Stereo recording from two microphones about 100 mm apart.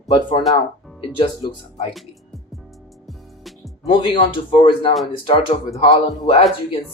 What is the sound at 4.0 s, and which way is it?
Speech, 55° left (ahead or behind).